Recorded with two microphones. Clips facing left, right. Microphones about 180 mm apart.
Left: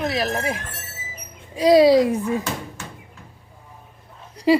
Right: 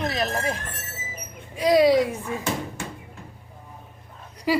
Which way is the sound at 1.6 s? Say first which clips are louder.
Left 4 dB; 35° left (ahead or behind).